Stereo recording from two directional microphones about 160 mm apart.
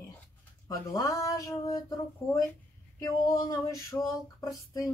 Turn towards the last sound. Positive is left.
turn(degrees=20)  # may be behind; listen again after turning